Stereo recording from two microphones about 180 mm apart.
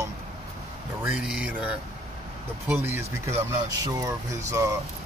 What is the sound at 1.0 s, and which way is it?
Speech, 5° right (ahead or behind).